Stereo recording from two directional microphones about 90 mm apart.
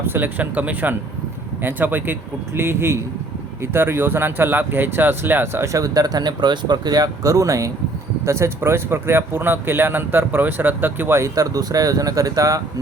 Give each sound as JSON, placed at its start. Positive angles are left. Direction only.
{"t": 0.0, "sound": "speech", "side_deg": -25}
{"t": 11.3, "sound": "speech", "side_deg": -45}